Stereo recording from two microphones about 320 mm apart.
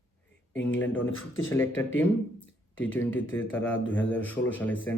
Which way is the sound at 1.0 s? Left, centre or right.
Left.